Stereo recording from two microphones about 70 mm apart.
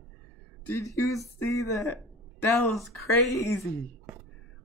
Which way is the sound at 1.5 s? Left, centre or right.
Left.